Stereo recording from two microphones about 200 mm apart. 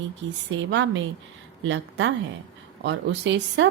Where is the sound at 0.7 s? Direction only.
65° right (ahead or behind).